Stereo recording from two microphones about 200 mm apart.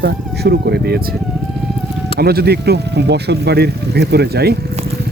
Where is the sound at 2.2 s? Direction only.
50° right (ahead or behind).